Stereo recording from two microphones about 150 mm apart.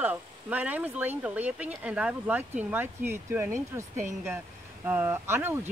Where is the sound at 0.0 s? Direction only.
10° right (ahead or behind).